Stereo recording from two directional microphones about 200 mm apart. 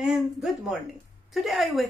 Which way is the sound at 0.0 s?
Centre (ahead or behind).